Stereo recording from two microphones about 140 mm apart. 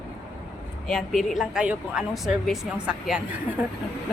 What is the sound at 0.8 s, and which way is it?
A woman's voice, centre (ahead or behind).